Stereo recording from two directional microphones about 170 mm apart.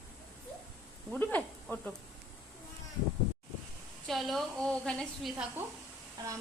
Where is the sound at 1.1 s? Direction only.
10° left (ahead or behind).